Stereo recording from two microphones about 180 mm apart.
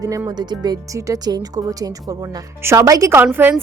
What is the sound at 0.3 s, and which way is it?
Speech, 25° right (ahead or behind).